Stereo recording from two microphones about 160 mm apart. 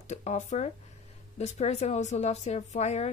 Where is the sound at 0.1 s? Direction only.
45° left (ahead or behind).